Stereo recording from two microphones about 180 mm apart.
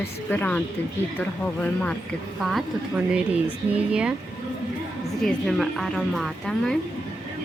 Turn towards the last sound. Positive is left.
turn(degrees=0)  # may be behind; listen again after turning